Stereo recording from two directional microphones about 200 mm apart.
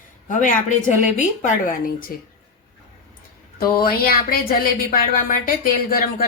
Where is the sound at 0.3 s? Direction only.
40° left (ahead or behind).